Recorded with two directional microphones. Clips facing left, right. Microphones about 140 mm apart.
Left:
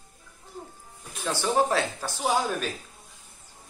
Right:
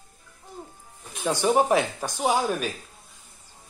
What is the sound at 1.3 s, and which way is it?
Speech, 15° right (ahead or behind).